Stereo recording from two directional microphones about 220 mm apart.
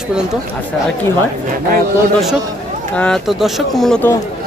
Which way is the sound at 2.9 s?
5° left (ahead or behind).